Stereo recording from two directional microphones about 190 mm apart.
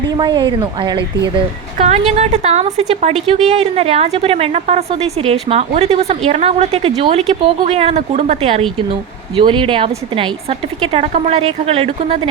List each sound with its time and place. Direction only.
0.2 s a woman's voice: 25° right (ahead or behind)